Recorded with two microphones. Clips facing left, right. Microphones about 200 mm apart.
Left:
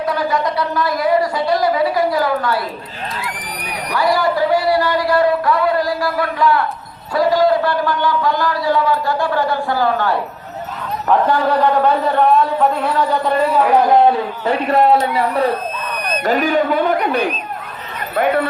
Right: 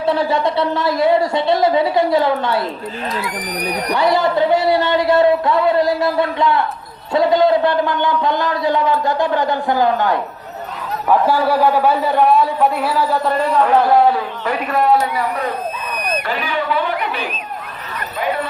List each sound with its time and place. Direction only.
0.0 s a man's voice: 25° right (ahead or behind)
3.2 s speech: 40° right (ahead or behind)
3.9 s a man's voice: 25° right (ahead or behind)
11.3 s speech: 5° right (ahead or behind)
14.4 s a man's voice: 30° left (ahead or behind)
16.1 s speech: 40° left (ahead or behind)